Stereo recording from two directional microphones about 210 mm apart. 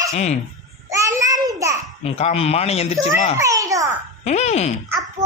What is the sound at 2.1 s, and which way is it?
Speech, 30° left (ahead or behind).